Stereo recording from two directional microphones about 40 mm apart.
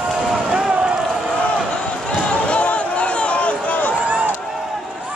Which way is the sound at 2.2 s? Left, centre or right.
Left.